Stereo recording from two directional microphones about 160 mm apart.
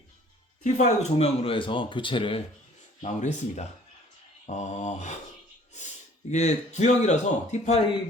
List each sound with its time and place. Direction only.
0.6 s speech: 45° left (ahead or behind)
3.0 s speech: 50° left (ahead or behind)
6.3 s speech: 45° left (ahead or behind)